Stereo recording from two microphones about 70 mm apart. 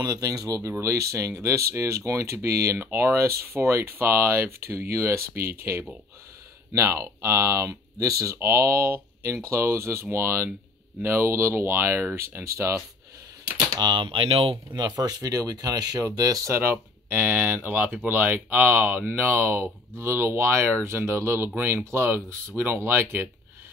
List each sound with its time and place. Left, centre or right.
0.0 s speech: right
12.5 s speech: right
13.7 s speech: right
14.8 s speech: right
16.4 s speech: right